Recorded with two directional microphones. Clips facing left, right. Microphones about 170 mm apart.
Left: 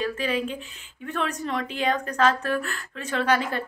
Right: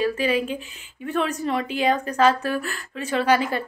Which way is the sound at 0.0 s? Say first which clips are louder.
Right 4 dB; 5° right (ahead or behind).